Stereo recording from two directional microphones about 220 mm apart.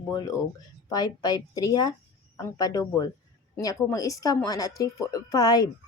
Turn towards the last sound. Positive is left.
turn(degrees=15)  # may be behind; listen again after turning